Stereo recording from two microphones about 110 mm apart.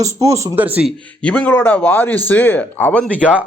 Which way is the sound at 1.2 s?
10° left (ahead or behind).